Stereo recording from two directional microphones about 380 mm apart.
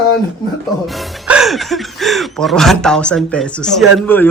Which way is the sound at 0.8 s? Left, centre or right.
Centre.